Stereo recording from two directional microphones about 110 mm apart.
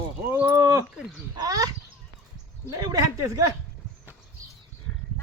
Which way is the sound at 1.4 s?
35° right (ahead or behind).